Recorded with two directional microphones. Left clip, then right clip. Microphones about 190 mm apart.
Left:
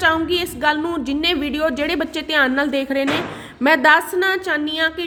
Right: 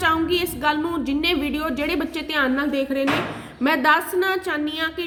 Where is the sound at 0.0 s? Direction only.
25° left (ahead or behind).